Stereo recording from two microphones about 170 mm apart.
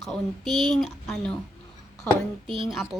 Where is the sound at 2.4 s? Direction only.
30° right (ahead or behind).